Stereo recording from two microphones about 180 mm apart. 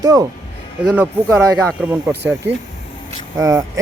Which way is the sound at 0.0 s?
20° right (ahead or behind).